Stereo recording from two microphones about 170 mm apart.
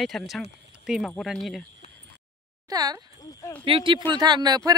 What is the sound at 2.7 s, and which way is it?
Speech, 20° right (ahead or behind).